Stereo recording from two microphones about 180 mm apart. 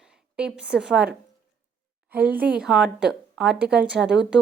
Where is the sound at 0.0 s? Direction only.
5° right (ahead or behind).